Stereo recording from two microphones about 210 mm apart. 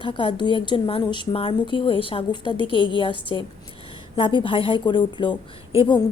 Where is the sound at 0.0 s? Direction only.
25° left (ahead or behind).